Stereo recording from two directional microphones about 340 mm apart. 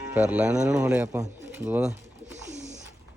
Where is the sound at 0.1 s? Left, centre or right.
Centre.